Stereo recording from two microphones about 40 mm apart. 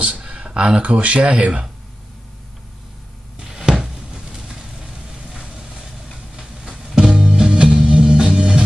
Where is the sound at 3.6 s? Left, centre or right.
Centre.